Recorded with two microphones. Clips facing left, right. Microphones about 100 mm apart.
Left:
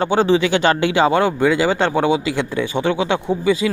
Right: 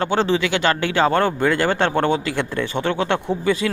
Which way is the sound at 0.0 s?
15° left (ahead or behind).